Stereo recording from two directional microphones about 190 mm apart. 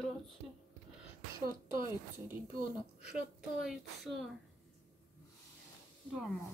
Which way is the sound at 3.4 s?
Centre (ahead or behind).